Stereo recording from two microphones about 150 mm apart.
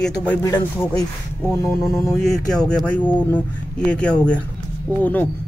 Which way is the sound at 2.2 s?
5° left (ahead or behind).